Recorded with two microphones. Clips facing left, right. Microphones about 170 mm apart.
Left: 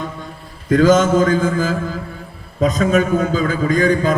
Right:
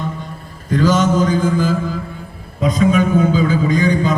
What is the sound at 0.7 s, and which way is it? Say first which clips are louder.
Speech: left 3 dB; 50° left (ahead or behind).